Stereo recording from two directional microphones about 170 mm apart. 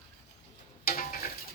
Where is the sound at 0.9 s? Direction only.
55° left (ahead or behind).